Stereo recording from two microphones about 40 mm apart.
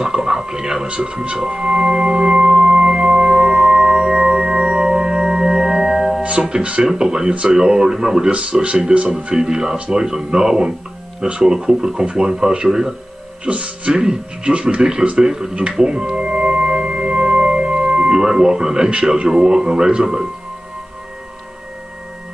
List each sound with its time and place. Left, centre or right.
0.0 s a sound: centre
0.8 s music: right
6.5 s speech: right
8.3 s speech: right
9.3 s speech: centre
13.5 s speech: right
13.9 s speech: right
15.8 s music: centre